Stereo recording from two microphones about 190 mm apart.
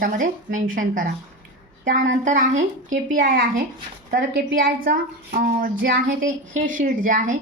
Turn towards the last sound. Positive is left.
turn(degrees=-45)  # may be behind; listen again after turning